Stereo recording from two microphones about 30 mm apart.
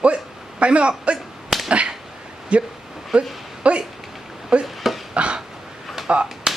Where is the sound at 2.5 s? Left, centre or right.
Right.